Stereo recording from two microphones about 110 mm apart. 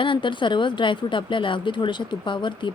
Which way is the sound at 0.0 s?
50° left (ahead or behind).